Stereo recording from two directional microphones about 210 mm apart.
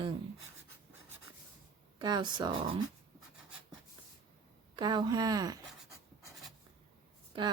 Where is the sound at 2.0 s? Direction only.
20° right (ahead or behind).